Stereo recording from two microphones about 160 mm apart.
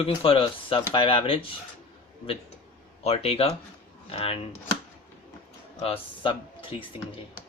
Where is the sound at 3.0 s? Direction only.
40° left (ahead or behind).